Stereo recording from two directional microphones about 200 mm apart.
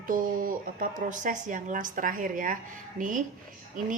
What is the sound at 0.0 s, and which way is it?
A woman's voice, 45° right (ahead or behind).